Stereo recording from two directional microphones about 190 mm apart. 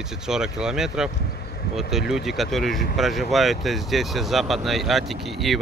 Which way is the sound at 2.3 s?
Centre (ahead or behind).